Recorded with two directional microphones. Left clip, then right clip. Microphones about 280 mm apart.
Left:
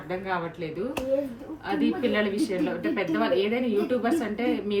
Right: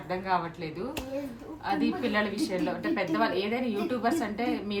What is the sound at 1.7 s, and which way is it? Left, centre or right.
A woman's voice, right.